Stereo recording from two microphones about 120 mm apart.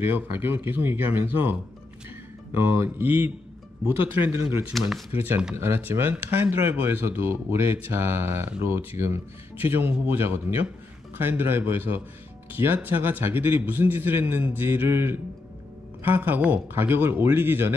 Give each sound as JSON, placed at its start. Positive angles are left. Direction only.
{"t": 0.0, "sound": "a man's voice", "side_deg": -20}
{"t": 4.7, "sound": "speech", "side_deg": 0}
{"t": 5.1, "sound": "a man's voice", "side_deg": -20}